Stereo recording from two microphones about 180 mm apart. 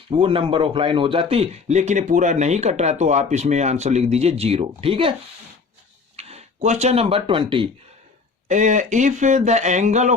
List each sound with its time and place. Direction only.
0.2 s a man's voice: 30° right (ahead or behind)
6.1 s speech: 35° right (ahead or behind)
8.4 s a man's voice: 40° right (ahead or behind)